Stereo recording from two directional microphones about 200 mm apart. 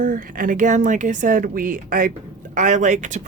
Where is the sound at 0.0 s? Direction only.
45° right (ahead or behind).